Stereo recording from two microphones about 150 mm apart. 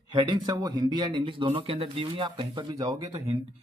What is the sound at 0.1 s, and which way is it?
Speech, 30° right (ahead or behind).